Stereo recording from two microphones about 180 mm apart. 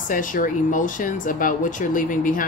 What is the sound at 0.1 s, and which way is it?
Speech, 45° left (ahead or behind).